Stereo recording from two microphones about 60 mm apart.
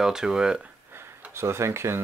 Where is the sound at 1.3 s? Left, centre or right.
Right.